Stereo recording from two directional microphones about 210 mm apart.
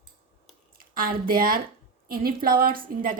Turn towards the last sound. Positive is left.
turn(degrees=-45)  # may be behind; listen again after turning